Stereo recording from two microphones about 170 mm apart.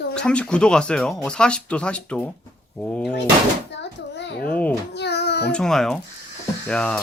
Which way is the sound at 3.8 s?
90° left.